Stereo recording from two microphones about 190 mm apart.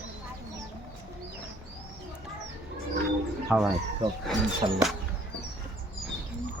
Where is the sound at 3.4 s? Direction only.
5° right (ahead or behind).